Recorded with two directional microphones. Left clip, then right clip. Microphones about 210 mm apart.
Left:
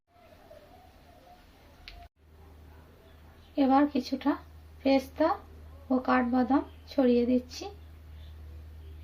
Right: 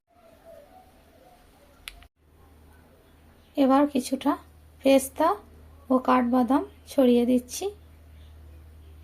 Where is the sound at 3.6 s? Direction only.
35° right (ahead or behind).